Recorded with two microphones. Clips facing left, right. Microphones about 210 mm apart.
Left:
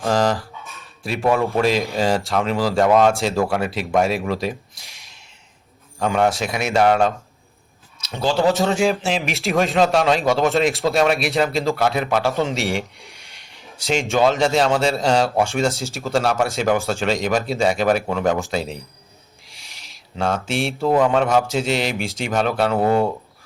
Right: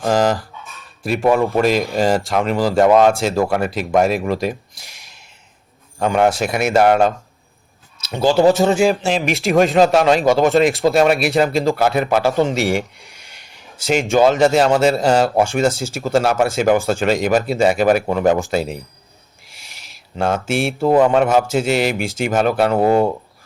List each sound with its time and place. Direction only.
0.0 s dog: centre (ahead or behind)
1.5 s a man's voice: centre (ahead or behind)
8.1 s a man's voice: 5° right (ahead or behind)
19.5 s a sound: centre (ahead or behind)
21.0 s a man's voice: 5° right (ahead or behind)
22.8 s speech: 30° right (ahead or behind)